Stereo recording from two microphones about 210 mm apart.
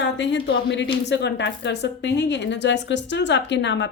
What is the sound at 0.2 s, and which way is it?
A woman's voice, 60° left (ahead or behind).